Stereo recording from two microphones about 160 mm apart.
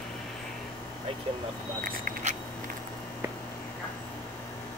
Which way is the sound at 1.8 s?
55° right (ahead or behind).